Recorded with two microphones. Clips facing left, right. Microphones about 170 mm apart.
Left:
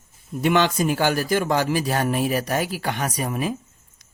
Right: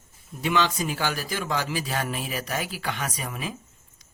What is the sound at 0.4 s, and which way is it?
Speech, 55° left (ahead or behind).